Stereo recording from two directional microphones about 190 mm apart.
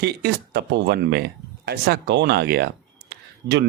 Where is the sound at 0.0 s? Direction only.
60° right (ahead or behind).